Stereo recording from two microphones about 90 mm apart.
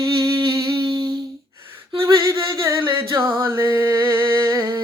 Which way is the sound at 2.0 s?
35° right (ahead or behind).